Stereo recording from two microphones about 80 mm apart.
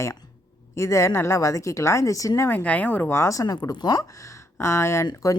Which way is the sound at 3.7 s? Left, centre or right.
Left.